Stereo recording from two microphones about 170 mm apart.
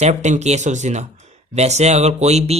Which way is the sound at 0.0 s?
45° right (ahead or behind).